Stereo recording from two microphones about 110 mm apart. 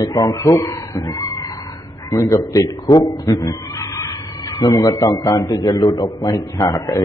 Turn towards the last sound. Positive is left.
turn(degrees=30)  # may be behind; listen again after turning